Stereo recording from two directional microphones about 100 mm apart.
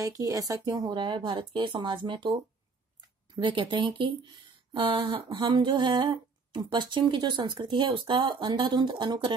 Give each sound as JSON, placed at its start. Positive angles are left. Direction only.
{"t": 0.0, "sound": "speech", "side_deg": -35}
{"t": 0.9, "sound": "speech", "side_deg": -50}
{"t": 3.3, "sound": "speech", "side_deg": -50}
{"t": 5.5, "sound": "a sound", "side_deg": -50}
{"t": 6.7, "sound": "speech", "side_deg": -55}